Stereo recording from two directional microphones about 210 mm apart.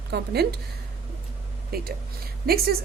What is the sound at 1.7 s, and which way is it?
A woman's voice, 50° right (ahead or behind).